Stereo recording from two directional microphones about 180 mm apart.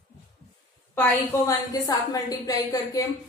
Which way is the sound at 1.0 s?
20° left (ahead or behind).